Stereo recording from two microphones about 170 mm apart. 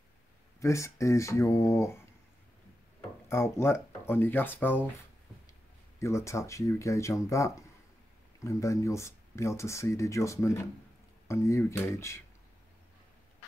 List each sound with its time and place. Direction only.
0.6 s speech: 15° left (ahead or behind)
3.3 s speech: 15° left (ahead or behind)
5.9 s speech: 15° left (ahead or behind)